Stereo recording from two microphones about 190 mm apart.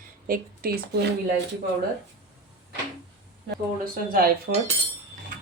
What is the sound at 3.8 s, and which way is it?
Speech, 50° right (ahead or behind).